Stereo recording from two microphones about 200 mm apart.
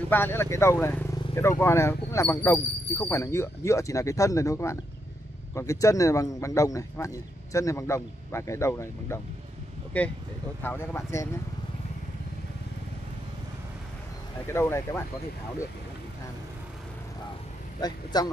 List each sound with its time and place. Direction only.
0.1 s speech: 10° left (ahead or behind)
14.5 s speech: 15° left (ahead or behind)
17.7 s a man's voice: 20° left (ahead or behind)